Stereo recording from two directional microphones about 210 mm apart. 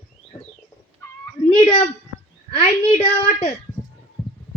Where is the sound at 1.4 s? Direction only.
20° left (ahead or behind).